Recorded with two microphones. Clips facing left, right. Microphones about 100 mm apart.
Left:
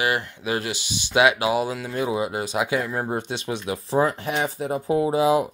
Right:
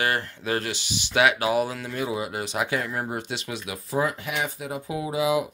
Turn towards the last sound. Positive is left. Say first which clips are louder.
# left 5 dB
turn(degrees=40)  # may be behind; listen again after turning